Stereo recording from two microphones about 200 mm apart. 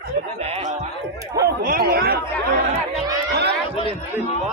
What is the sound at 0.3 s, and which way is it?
Snicker, 30° right (ahead or behind).